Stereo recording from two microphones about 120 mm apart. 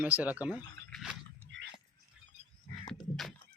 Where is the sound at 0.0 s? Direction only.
15° right (ahead or behind).